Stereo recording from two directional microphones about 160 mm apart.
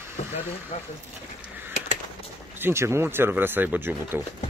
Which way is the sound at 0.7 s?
45° left (ahead or behind).